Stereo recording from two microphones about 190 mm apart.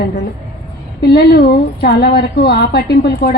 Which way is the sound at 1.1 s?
55° left (ahead or behind).